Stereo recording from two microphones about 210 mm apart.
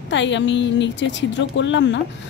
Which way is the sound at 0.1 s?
60° left (ahead or behind).